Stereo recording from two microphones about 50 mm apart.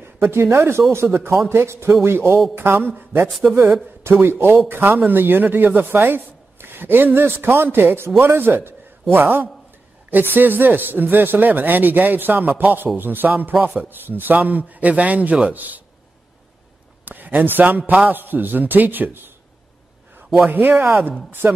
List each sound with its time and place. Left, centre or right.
0.0 s a man's voice: right
3.3 s a man's voice: centre
4.0 s speech: right
17.0 s speech: right
20.4 s speech: right